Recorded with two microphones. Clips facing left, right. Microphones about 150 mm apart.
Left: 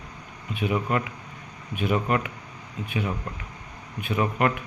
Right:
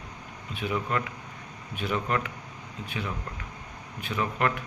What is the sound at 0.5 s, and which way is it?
A man's voice, 15° left (ahead or behind).